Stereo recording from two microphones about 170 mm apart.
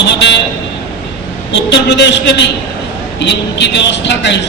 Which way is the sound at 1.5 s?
90° left.